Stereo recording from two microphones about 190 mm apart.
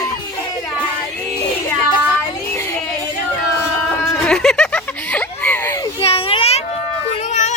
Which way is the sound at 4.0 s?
15° left (ahead or behind).